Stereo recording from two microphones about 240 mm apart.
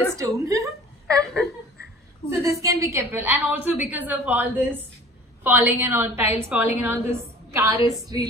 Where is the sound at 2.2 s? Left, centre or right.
Centre.